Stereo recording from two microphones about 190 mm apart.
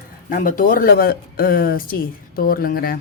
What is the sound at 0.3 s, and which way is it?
Speech, 45° left (ahead or behind).